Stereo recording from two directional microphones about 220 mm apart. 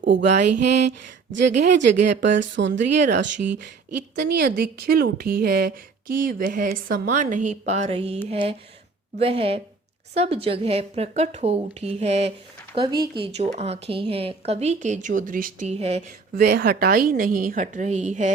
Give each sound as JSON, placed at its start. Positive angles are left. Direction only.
{"t": 0.0, "sound": "a sound", "side_deg": -55}
{"t": 0.7, "sound": "a woman's voice", "side_deg": -50}
{"t": 16.4, "sound": "a woman's voice", "side_deg": -45}